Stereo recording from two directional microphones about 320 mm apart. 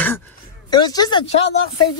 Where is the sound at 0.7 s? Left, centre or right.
Centre.